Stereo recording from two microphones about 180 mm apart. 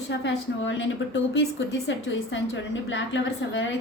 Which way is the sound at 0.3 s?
90° left.